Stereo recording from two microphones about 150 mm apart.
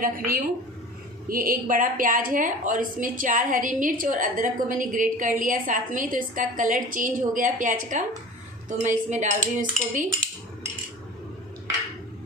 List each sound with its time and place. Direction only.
0.0 s a woman's voice: 70° right (ahead or behind)